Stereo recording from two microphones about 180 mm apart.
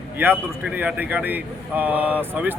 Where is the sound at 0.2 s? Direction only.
10° right (ahead or behind).